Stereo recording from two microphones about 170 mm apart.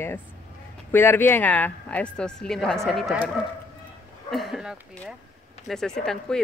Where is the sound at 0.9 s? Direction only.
10° left (ahead or behind).